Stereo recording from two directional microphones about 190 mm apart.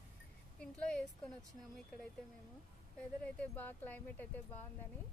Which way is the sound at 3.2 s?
10° left (ahead or behind).